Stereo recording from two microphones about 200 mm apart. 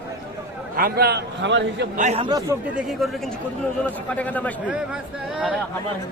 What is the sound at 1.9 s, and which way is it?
Speech, 35° right (ahead or behind).